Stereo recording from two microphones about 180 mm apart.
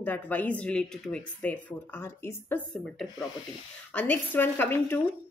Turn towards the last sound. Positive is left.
turn(degrees=10)  # may be behind; listen again after turning